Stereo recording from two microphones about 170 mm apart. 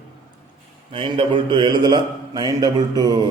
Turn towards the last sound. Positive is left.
turn(degrees=-20)  # may be behind; listen again after turning